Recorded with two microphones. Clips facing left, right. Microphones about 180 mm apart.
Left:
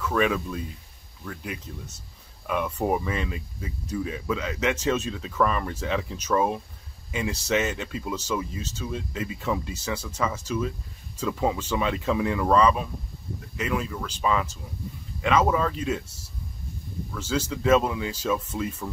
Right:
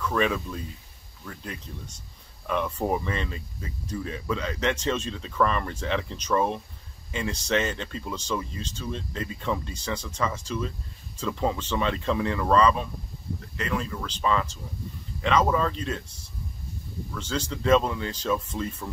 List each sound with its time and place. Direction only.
0.0 s speech: 5° left (ahead or behind)